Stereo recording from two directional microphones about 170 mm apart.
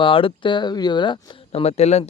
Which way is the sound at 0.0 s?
30° left (ahead or behind).